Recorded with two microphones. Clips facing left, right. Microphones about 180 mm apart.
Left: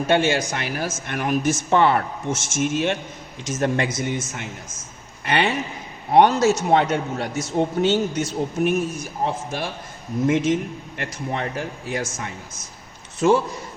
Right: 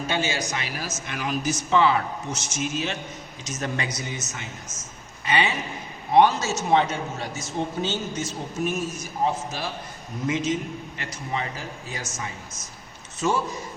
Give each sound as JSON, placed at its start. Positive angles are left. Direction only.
{"t": 0.1, "sound": "a man's voice", "side_deg": 55}
{"t": 5.3, "sound": "a man's voice", "side_deg": 65}
{"t": 13.2, "sound": "a man's voice", "side_deg": 60}